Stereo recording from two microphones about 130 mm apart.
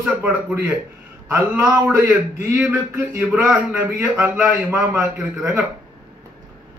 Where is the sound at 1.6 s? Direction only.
25° right (ahead or behind).